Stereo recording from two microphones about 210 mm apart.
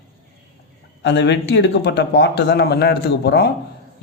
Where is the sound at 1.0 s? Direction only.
55° left (ahead or behind).